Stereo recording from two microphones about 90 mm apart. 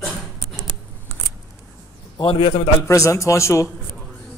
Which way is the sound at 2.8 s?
35° left (ahead or behind).